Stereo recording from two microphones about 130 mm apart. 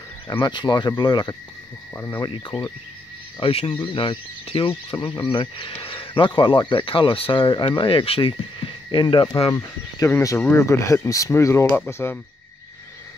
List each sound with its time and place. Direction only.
0.3 s speech: 35° left (ahead or behind)
9.5 s speech: 25° left (ahead or behind)